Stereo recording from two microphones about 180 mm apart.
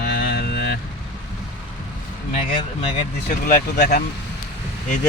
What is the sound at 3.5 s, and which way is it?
Speech, 55° left (ahead or behind).